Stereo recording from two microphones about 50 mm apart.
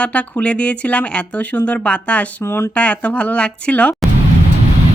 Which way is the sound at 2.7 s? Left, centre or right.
Left.